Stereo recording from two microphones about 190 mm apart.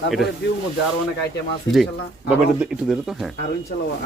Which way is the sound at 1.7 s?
5° right (ahead or behind).